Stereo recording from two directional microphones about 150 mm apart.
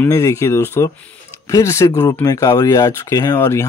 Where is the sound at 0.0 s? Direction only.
20° left (ahead or behind).